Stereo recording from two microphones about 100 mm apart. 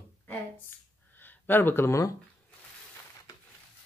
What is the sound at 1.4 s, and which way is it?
Speech, 20° left (ahead or behind).